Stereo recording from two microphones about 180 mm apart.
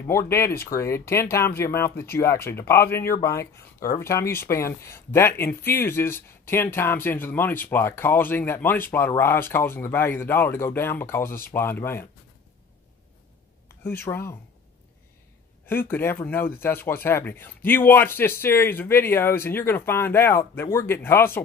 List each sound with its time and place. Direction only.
0.0 s speech: 15° left (ahead or behind)
13.7 s speech: 15° left (ahead or behind)
15.6 s speech: 10° left (ahead or behind)